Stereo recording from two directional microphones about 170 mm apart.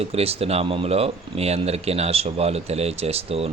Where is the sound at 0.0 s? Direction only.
35° right (ahead or behind).